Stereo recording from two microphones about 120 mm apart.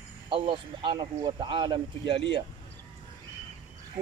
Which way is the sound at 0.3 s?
45° right (ahead or behind).